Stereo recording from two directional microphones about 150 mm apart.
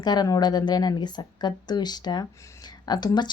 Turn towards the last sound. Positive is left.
turn(degrees=30)  # may be behind; listen again after turning